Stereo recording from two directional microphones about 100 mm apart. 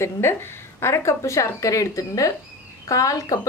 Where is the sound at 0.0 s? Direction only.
25° left (ahead or behind).